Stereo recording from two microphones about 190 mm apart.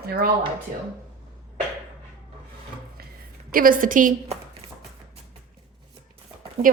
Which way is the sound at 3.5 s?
45° right (ahead or behind).